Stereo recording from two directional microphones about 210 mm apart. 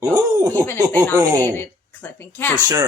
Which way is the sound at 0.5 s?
10° left (ahead or behind).